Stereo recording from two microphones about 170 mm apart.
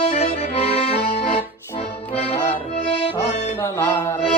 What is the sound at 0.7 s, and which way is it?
Accordion, 35° left (ahead or behind).